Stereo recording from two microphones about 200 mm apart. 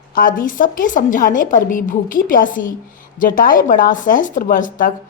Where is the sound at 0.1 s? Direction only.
45° left (ahead or behind).